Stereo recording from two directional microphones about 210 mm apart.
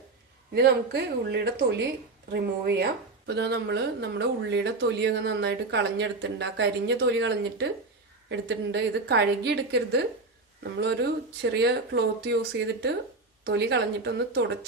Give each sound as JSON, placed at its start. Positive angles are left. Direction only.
{"t": 0.5, "sound": "a woman's voice", "side_deg": -50}